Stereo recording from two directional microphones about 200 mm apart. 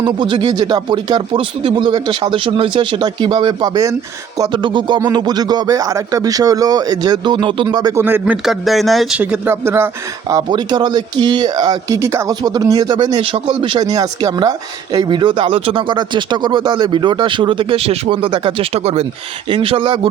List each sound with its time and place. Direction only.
0.0 s speech: 25° right (ahead or behind)